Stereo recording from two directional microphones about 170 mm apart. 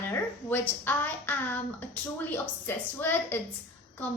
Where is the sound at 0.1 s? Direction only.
15° left (ahead or behind).